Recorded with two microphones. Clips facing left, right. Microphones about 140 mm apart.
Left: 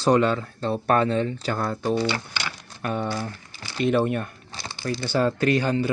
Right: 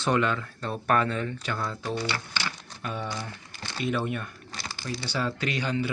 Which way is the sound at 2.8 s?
55° left (ahead or behind).